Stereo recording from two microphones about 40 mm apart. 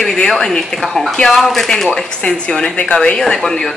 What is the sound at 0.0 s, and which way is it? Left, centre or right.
Speech, centre.